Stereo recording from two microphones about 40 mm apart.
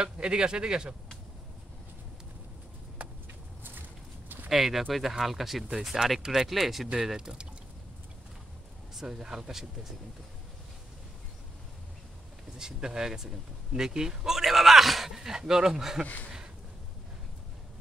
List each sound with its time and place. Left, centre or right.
0.0 s speech: right
3.0 s a sound: right
4.5 s speech: centre
7.2 s speech: centre
8.9 s speech: centre
12.5 s speech: centre